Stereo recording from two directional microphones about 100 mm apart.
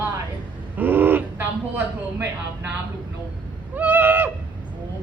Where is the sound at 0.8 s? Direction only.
20° right (ahead or behind).